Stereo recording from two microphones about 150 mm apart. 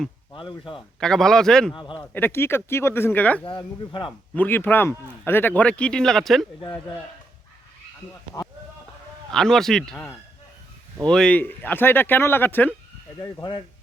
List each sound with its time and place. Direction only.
0.3 s speech: 35° left (ahead or behind)
0.9 s a man's voice: 5° left (ahead or behind)
1.7 s speech: 30° left (ahead or behind)
2.0 s speech: 15° left (ahead or behind)
3.4 s speech: 30° left (ahead or behind)
4.4 s speech: 15° left (ahead or behind)
9.3 s a man's voice: 5° left (ahead or behind)
11.1 s speech: 5° left (ahead or behind)
13.1 s speech: 30° left (ahead or behind)